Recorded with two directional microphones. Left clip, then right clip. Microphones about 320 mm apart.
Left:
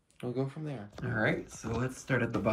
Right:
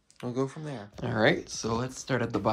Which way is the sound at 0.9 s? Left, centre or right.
Centre.